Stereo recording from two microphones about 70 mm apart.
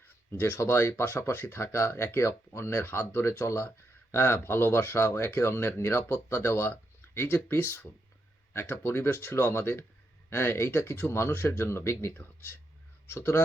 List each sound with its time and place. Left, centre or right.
0.3 s speech: left